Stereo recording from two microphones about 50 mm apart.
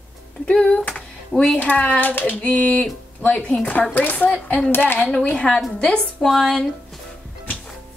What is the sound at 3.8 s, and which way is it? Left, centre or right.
Speech, left.